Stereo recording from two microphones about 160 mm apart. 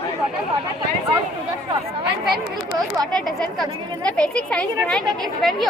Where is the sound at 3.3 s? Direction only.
Centre (ahead or behind).